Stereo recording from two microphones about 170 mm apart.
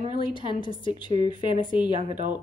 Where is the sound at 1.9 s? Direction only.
45° right (ahead or behind).